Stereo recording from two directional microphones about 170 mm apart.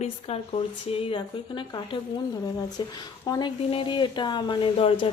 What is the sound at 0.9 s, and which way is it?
Speech, 25° left (ahead or behind).